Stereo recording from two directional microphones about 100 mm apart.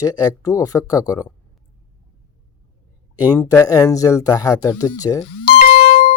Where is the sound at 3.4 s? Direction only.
35° left (ahead or behind).